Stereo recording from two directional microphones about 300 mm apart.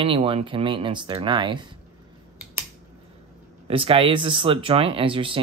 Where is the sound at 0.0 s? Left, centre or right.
Centre.